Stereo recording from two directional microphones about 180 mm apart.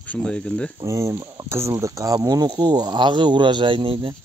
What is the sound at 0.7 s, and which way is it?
Speech, 15° right (ahead or behind).